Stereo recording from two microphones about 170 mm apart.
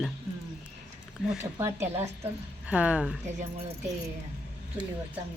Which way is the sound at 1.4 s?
15° right (ahead or behind).